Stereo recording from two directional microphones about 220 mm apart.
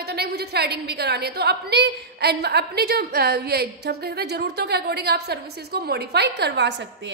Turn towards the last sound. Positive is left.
turn(degrees=-50)  # may be behind; listen again after turning